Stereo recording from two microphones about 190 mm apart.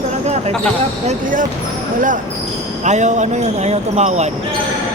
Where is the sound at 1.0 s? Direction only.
40° right (ahead or behind).